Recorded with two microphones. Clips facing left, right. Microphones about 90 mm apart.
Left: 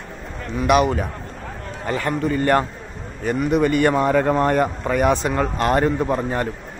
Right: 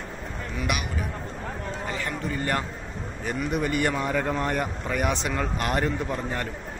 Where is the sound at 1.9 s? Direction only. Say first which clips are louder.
Left 11 dB; 55° left (ahead or behind).